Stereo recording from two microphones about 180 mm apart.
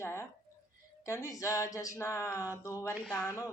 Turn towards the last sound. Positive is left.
turn(degrees=15)  # may be behind; listen again after turning